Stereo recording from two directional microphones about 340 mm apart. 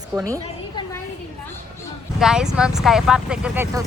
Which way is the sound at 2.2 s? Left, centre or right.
Centre.